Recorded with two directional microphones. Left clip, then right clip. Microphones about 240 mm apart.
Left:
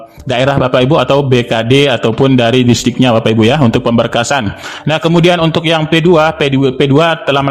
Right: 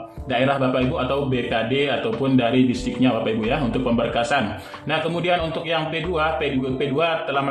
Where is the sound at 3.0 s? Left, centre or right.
Left.